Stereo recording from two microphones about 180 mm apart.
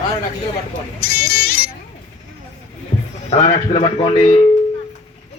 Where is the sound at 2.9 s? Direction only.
40° left (ahead or behind).